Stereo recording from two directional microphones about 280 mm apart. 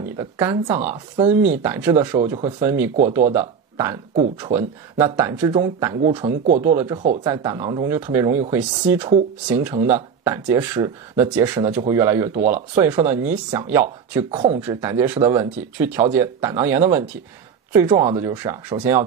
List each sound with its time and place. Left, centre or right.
0.2 s speech: centre
6.3 s speech: right
6.6 s speech: centre